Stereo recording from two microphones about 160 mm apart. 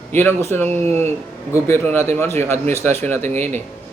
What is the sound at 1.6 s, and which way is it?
Speech, 15° left (ahead or behind).